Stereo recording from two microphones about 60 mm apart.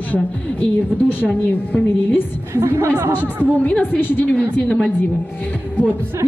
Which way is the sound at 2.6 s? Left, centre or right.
Right.